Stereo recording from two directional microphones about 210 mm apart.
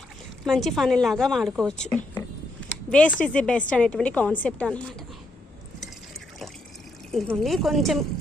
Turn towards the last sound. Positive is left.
turn(degrees=0)  # may be behind; listen again after turning